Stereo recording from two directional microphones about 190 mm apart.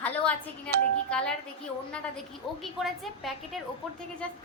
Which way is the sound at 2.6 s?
Centre (ahead or behind).